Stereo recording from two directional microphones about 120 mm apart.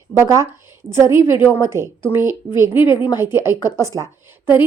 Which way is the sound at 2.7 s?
45° left (ahead or behind).